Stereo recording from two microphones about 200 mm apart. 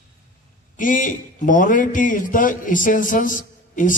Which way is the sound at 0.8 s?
40° left (ahead or behind).